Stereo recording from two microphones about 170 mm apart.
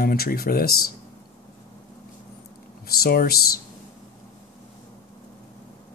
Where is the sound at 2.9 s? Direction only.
65° left (ahead or behind).